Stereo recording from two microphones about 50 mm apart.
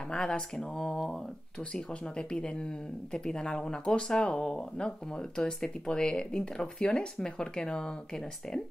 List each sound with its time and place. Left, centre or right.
0.1 s speech: centre